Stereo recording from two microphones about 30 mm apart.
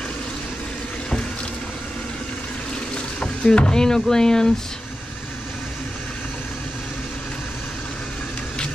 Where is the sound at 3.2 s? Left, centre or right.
Left.